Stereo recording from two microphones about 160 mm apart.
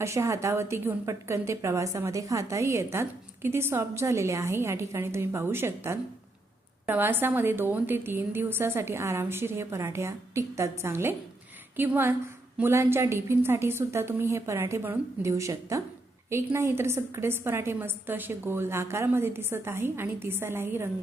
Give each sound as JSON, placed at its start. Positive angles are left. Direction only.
{"t": 0.0, "sound": "a woman's voice", "side_deg": -15}